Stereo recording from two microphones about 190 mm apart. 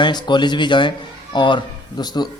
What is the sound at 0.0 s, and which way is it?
Speech, 25° left (ahead or behind).